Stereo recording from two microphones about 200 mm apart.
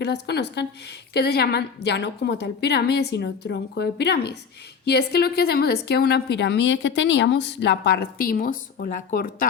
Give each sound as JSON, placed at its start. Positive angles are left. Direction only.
{"t": 0.0, "sound": "a woman's voice", "side_deg": 55}